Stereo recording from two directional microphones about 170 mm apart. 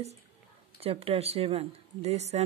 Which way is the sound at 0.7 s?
35° right (ahead or behind).